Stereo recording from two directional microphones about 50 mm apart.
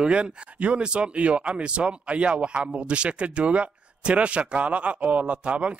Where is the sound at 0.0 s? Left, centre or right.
Right.